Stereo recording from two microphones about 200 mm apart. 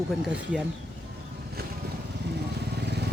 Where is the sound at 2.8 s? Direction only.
55° right (ahead or behind).